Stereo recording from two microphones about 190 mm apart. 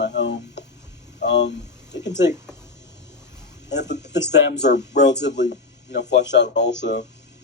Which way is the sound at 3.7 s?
65° left (ahead or behind).